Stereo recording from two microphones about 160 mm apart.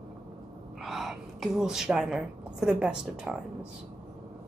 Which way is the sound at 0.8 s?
Centre (ahead or behind).